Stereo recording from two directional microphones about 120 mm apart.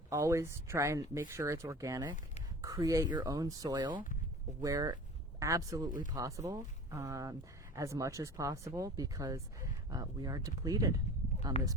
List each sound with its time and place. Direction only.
0.1 s speech: 25° right (ahead or behind)